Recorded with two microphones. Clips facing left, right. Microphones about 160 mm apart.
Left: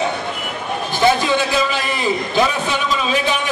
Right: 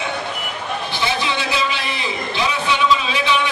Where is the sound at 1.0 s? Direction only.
45° left (ahead or behind).